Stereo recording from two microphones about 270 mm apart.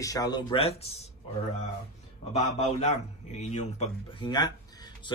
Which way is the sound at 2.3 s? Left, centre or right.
Left.